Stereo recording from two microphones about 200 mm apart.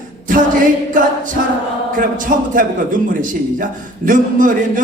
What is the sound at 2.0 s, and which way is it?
A man's voice, 40° right (ahead or behind).